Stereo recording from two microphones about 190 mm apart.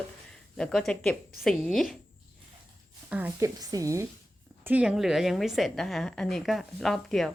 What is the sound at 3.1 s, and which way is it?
A woman's voice, 15° right (ahead or behind).